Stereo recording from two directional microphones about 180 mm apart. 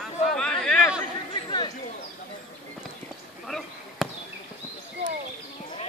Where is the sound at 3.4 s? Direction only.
Centre (ahead or behind).